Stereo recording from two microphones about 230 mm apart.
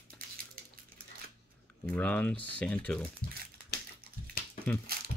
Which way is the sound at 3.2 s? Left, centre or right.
Right.